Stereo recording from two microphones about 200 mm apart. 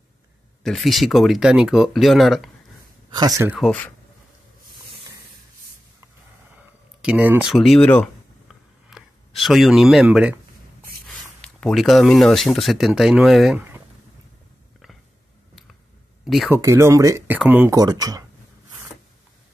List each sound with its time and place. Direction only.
0.7 s speech: centre (ahead or behind)
3.1 s speech: 20° right (ahead or behind)
3.5 s speech: 5° left (ahead or behind)
7.0 s speech: 5° right (ahead or behind)
11.1 s speech: 5° left (ahead or behind)
16.4 s speech: 15° right (ahead or behind)